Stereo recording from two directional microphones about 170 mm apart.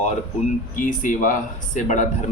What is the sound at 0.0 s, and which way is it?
Speech, 50° left (ahead or behind).